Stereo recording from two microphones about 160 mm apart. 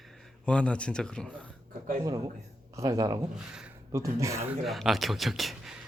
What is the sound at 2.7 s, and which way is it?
Speech, 20° right (ahead or behind).